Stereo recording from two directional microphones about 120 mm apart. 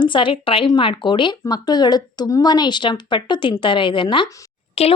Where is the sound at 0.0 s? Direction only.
45° left (ahead or behind).